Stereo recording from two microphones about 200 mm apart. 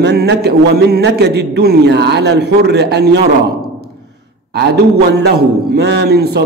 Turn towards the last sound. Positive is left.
turn(degrees=-55)  # may be behind; listen again after turning